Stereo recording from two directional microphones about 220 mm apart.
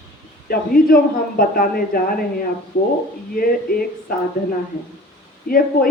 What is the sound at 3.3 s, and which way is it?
Speech, 40° left (ahead or behind).